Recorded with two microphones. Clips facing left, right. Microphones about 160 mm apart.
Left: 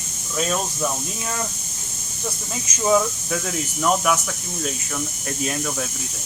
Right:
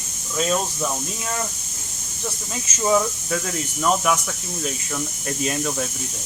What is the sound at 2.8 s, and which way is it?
Speech, centre (ahead or behind).